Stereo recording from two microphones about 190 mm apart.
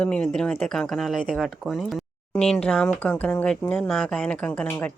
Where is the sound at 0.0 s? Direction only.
5° left (ahead or behind).